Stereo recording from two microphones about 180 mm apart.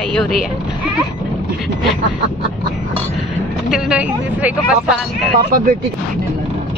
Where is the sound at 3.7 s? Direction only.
5° right (ahead or behind).